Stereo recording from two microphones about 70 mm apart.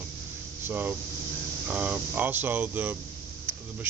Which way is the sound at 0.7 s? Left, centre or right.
Right.